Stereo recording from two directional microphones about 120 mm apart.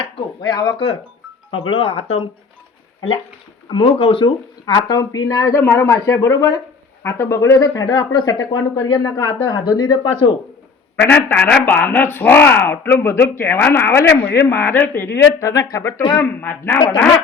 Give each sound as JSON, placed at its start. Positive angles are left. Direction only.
{"t": 0.0, "sound": "a sound", "side_deg": 40}
{"t": 1.5, "sound": "speech", "side_deg": 50}
{"t": 3.7, "sound": "speech", "side_deg": 45}
{"t": 4.8, "sound": "speech", "side_deg": 35}
{"t": 11.0, "sound": "a man's voice", "side_deg": 10}